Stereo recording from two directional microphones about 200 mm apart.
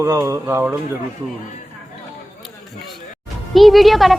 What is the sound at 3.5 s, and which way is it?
Speech, centre (ahead or behind).